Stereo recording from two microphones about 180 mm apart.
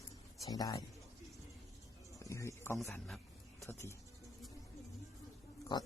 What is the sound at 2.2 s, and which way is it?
Speech, 15° left (ahead or behind).